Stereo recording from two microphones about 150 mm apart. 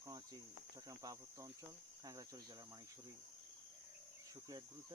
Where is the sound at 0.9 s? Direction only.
25° right (ahead or behind).